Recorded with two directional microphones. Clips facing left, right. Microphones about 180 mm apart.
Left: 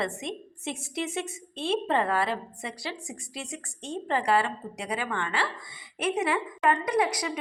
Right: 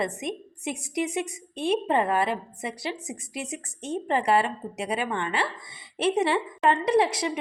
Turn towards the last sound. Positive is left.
turn(degrees=-25)  # may be behind; listen again after turning